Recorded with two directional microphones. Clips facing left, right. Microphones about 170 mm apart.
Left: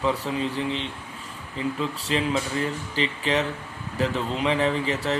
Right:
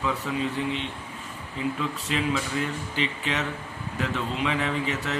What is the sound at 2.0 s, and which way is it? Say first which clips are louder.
A man's voice: left 2 dB; 35° left (ahead or behind).